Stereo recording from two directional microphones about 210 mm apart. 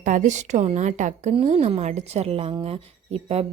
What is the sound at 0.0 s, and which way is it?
A woman's voice, 35° right (ahead or behind).